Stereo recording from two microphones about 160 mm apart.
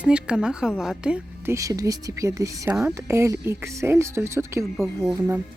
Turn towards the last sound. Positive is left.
turn(degrees=-25)  # may be behind; listen again after turning